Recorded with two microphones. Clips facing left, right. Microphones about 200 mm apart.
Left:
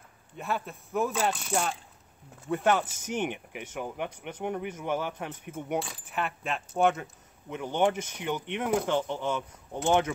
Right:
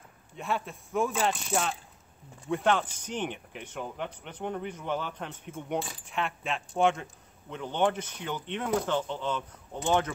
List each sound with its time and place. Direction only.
0.4 s speech: centre (ahead or behind)